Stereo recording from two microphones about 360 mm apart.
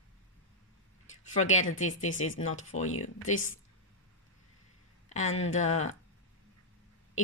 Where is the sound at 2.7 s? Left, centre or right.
Centre.